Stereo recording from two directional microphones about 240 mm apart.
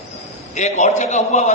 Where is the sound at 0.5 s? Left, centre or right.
Left.